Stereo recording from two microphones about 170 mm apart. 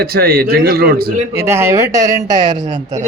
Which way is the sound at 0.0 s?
65° right (ahead or behind).